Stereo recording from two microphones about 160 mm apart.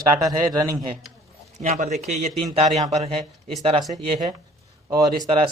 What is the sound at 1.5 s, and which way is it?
A man's voice, 50° right (ahead or behind).